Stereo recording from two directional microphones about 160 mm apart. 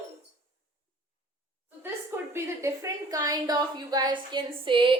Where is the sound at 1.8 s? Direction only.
15° right (ahead or behind).